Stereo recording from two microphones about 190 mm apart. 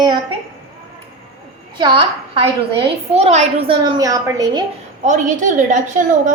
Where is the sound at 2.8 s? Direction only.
35° right (ahead or behind).